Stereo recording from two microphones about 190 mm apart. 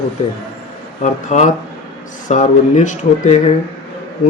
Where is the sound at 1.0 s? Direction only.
40° left (ahead or behind).